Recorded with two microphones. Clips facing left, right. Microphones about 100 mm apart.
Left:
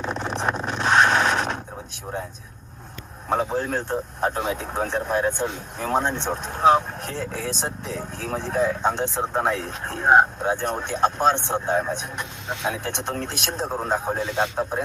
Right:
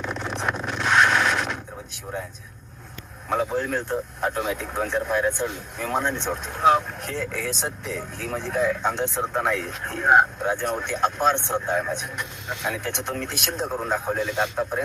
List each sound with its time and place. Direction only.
0.0 s zipper: 20° left (ahead or behind)
2.1 s speech: 20° left (ahead or behind)
3.2 s speech: 20° left (ahead or behind)